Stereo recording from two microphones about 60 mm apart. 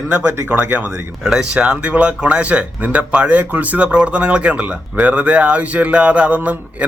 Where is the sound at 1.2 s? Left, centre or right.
Centre.